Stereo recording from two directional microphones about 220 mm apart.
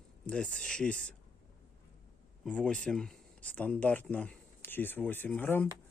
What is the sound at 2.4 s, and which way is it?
Speech, 5° left (ahead or behind).